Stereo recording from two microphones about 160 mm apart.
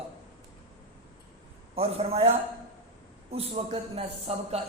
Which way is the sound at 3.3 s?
40° right (ahead or behind).